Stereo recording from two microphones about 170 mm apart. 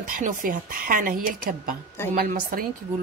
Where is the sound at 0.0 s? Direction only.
55° right (ahead or behind).